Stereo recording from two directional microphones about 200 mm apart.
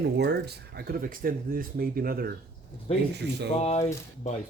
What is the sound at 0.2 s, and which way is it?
Speech, 55° right (ahead or behind).